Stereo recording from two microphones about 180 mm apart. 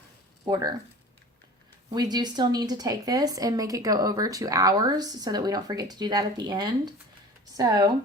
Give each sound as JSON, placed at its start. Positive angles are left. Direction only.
{"t": 0.4, "sound": "speech", "side_deg": -20}
{"t": 1.9, "sound": "speech", "side_deg": -25}